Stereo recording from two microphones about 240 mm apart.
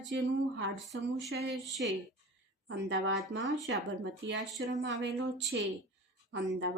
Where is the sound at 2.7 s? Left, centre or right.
Right.